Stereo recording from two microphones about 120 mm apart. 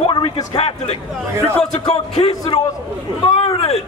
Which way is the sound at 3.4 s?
55° left (ahead or behind).